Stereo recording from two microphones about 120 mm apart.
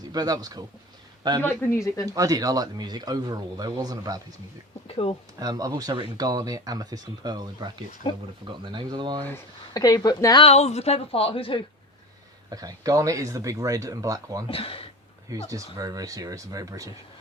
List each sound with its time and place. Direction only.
0.1 s speech: 30° right (ahead or behind)
1.4 s speech: 15° left (ahead or behind)
2.0 s speech: 30° right (ahead or behind)
4.9 s a woman's voice: 55° left (ahead or behind)
5.4 s speech: 30° right (ahead or behind)
9.7 s a woman's voice: 30° left (ahead or behind)
10.4 s a woman's voice: 65° left (ahead or behind); by 11.6 s 50° left (ahead or behind)
12.5 s speech: 30° right (ahead or behind)
14.4 s speech: 50° left (ahead or behind)
15.3 s speech: 30° right (ahead or behind)